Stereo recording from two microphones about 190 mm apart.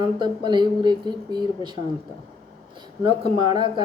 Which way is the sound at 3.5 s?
25° right (ahead or behind).